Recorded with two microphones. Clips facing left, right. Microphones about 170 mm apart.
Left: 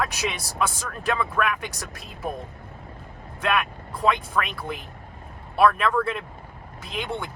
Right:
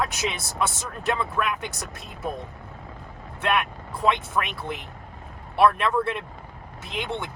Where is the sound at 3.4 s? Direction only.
25° right (ahead or behind).